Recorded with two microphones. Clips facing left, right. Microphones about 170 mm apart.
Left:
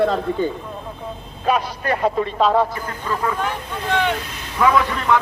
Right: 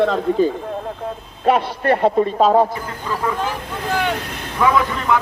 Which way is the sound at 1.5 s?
30° right (ahead or behind).